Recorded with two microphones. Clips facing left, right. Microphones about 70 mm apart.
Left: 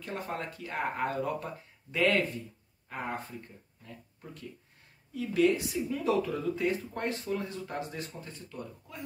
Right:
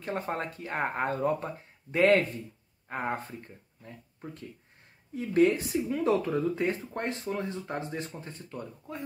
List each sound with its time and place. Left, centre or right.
0.0 s speech: right